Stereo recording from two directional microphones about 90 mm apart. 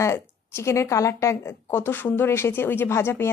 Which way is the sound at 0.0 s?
30° left (ahead or behind).